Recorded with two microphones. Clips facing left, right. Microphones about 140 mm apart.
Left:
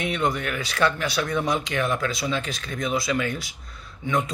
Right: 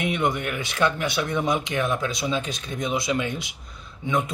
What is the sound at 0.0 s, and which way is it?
Speech, 20° right (ahead or behind).